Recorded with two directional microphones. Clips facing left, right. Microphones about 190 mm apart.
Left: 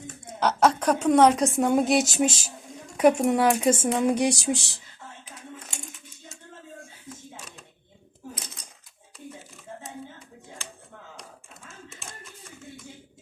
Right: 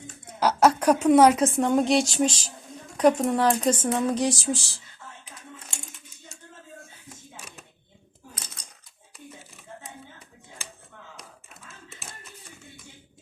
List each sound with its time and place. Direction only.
0.3 s a woman's voice: 10° right (ahead or behind); by 4.8 s 15° left (ahead or behind)